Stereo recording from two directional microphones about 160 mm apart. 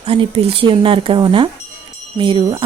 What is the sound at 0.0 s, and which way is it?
Speech, 35° right (ahead or behind).